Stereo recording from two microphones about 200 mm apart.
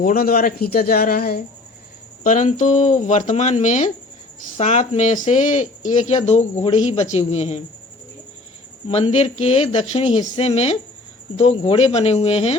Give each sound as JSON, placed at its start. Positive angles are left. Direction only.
{"t": 0.0, "sound": "speech", "side_deg": 45}
{"t": 8.9, "sound": "speech", "side_deg": 35}